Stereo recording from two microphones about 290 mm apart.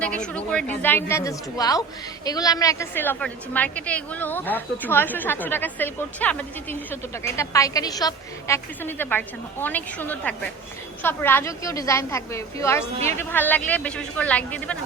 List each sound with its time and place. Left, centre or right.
0.0 s a woman's voice: centre